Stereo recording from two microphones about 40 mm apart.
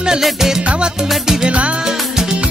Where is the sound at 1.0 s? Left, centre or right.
Centre.